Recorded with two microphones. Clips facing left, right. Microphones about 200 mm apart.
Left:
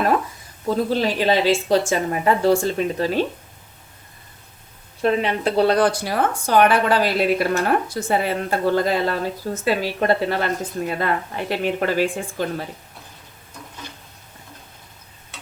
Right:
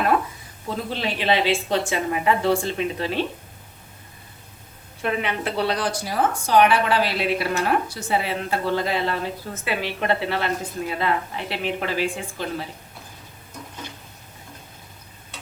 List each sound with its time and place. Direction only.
0.9 s a woman's voice: 40° left (ahead or behind)
5.0 s a woman's voice: 35° left (ahead or behind)